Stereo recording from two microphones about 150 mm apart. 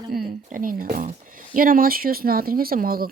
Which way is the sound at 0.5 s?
65° right (ahead or behind).